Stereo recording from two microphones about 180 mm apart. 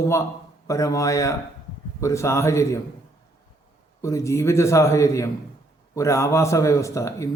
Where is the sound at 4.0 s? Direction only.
15° left (ahead or behind).